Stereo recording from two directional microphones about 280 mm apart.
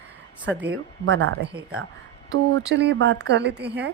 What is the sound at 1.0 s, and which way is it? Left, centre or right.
Speech, right.